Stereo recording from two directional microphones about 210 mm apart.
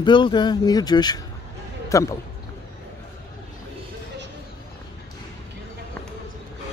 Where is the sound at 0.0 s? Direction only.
20° left (ahead or behind).